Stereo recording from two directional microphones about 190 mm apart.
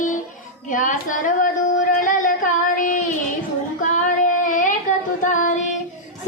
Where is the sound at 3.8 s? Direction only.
40° left (ahead or behind).